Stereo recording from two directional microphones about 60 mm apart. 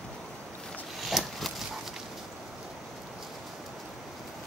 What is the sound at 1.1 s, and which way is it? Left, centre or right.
Horse, centre.